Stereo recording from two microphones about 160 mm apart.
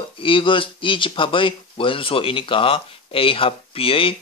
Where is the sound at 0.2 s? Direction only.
30° left (ahead or behind).